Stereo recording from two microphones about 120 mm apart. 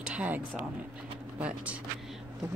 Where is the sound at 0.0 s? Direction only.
10° right (ahead or behind).